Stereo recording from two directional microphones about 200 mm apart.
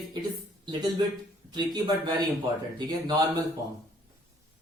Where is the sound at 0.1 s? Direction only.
20° right (ahead or behind).